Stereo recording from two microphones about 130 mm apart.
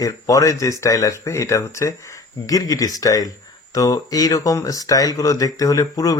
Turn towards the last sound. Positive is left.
turn(degrees=25)  # may be behind; listen again after turning